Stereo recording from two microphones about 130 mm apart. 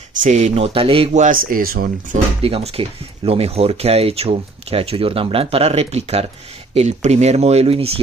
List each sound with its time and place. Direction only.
0.2 s speech: 70° right (ahead or behind)
0.6 s speech: 45° right (ahead or behind)
1.1 s speech: 80° right
2.4 s speech: 50° right (ahead or behind)